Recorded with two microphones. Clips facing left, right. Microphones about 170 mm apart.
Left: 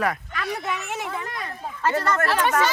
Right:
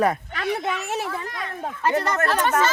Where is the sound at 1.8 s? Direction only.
15° right (ahead or behind).